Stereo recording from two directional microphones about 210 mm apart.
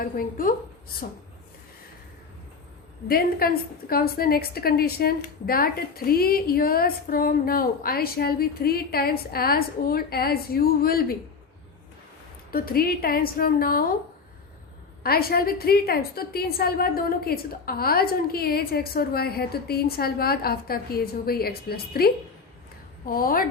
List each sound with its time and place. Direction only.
0.0 s a woman's voice: 40° left (ahead or behind)
3.1 s a woman's voice: 45° left (ahead or behind)
12.5 s a woman's voice: 45° left (ahead or behind)
15.0 s a woman's voice: 45° left (ahead or behind)